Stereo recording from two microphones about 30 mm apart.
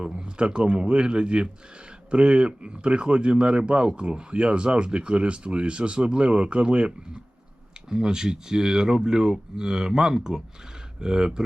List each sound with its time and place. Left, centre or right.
0.1 s speech: right
7.9 s speech: right